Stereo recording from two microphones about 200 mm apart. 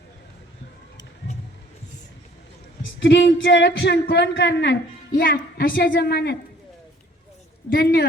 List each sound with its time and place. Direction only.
2.8 s speech: 65° left (ahead or behind)
5.1 s a woman's voice: 45° left (ahead or behind)
7.7 s a woman's voice: 50° left (ahead or behind)